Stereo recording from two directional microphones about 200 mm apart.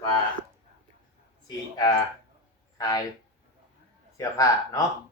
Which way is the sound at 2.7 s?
20° left (ahead or behind).